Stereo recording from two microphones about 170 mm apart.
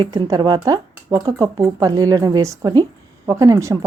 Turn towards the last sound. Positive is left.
turn(degrees=-20)  # may be behind; listen again after turning